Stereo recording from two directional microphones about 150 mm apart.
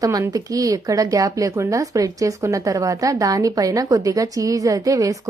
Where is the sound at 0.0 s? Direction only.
25° right (ahead or behind).